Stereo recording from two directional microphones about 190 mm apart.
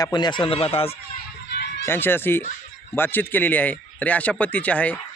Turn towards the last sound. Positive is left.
turn(degrees=5)  # may be behind; listen again after turning